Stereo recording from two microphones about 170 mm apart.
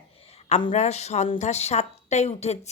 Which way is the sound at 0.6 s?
40° left (ahead or behind).